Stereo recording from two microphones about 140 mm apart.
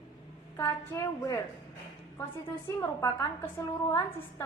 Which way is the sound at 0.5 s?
20° left (ahead or behind).